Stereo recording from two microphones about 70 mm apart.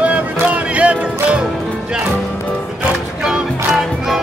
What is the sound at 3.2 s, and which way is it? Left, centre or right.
Music, centre.